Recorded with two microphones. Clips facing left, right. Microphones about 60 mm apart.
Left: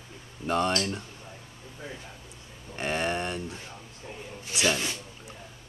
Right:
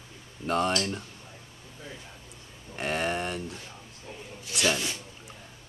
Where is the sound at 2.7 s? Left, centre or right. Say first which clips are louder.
Even; centre.